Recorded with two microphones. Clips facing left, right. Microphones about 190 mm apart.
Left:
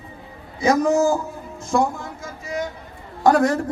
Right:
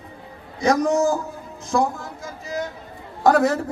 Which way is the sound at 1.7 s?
Centre (ahead or behind).